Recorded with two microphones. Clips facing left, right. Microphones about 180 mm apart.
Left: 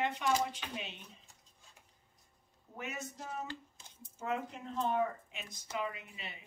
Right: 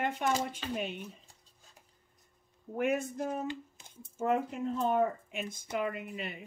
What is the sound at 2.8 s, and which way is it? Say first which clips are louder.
Speech: right 13 dB; 55° right (ahead or behind).